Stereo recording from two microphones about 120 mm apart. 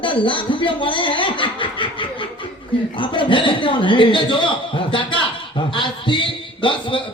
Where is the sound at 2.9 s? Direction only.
45° left (ahead or behind).